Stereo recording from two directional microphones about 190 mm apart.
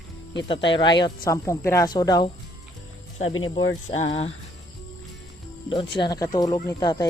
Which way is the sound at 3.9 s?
30° left (ahead or behind).